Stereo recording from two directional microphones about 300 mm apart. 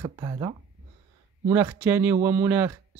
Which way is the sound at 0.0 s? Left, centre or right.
Centre.